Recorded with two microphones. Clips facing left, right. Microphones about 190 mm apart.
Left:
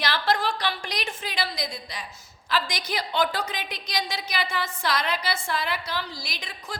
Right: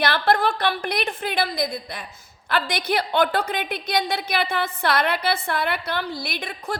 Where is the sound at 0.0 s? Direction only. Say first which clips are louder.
Right 5 dB; 55° right (ahead or behind).